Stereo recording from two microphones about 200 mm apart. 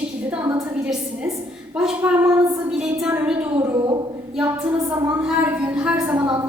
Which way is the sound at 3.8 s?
20° right (ahead or behind).